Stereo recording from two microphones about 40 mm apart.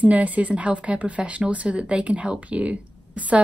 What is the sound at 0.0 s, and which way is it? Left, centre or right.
A woman's voice, right.